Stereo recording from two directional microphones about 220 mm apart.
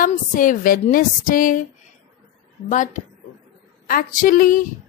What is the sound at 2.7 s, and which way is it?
A woman's voice, 35° left (ahead or behind).